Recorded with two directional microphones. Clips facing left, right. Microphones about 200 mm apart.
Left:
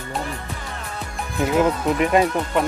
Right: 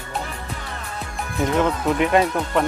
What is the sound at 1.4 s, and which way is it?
Speech, 5° left (ahead or behind).